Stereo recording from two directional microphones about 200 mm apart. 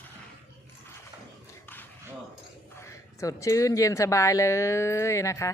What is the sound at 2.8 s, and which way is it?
Speech, 15° left (ahead or behind).